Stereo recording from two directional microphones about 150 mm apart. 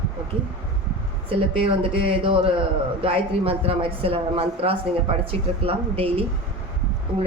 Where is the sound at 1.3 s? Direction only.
35° right (ahead or behind).